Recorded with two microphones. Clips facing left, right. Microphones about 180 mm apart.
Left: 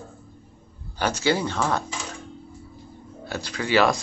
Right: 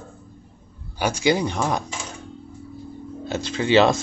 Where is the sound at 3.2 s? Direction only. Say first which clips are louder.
Right 5 dB; 20° right (ahead or behind).